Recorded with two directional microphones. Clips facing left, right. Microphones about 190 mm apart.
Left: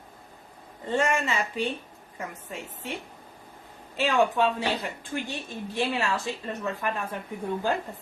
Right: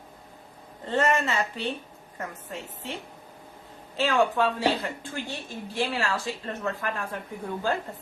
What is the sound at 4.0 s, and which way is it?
Speech, 15° left (ahead or behind).